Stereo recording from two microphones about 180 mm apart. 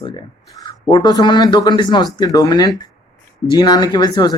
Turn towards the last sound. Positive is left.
turn(degrees=25)  # may be behind; listen again after turning